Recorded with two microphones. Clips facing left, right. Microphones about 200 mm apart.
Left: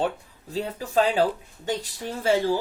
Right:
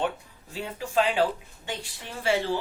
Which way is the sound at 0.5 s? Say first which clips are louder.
Left 3 dB; 40° left (ahead or behind).